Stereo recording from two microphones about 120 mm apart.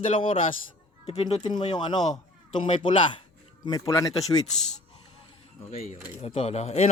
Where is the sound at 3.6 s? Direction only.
30° left (ahead or behind).